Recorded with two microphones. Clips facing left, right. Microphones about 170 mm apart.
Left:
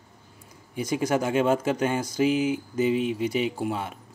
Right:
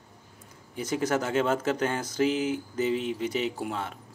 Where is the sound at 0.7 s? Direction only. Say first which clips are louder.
Left 2 dB; 10° left (ahead or behind).